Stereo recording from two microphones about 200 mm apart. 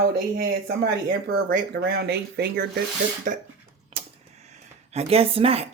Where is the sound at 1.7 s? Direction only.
50° right (ahead or behind).